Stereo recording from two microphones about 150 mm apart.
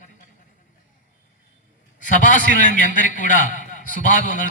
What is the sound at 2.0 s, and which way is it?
A man's voice, 60° left (ahead or behind).